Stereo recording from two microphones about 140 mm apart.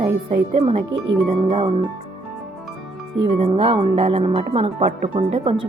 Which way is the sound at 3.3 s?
40° right (ahead or behind).